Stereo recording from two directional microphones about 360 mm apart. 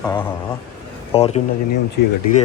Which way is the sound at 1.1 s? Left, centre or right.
Centre.